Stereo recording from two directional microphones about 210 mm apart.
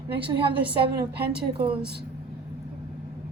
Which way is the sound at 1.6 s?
50° right (ahead or behind).